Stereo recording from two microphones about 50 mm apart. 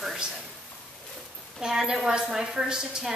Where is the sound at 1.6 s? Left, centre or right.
Centre.